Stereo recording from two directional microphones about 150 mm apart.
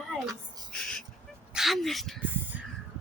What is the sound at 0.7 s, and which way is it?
Bird, 5° left (ahead or behind).